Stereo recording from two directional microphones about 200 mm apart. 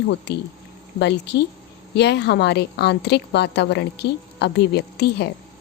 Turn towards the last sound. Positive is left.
turn(degrees=55)  # may be behind; listen again after turning